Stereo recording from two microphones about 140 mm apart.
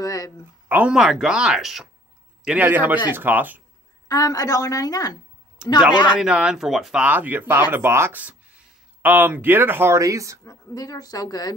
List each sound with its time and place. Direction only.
0.0 s a sound: 25° left (ahead or behind)
0.7 s speech: 10° right (ahead or behind)
4.1 s speech: 25° left (ahead or behind)
6.1 s speech: 5° right (ahead or behind); by 10.4 s 20° right (ahead or behind)
10.4 s speech: 25° left (ahead or behind)